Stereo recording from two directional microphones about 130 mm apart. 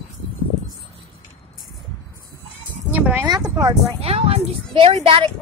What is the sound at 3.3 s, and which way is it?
Speech, 30° right (ahead or behind).